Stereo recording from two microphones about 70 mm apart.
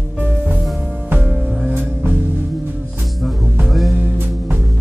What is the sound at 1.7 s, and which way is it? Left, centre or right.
Music, right.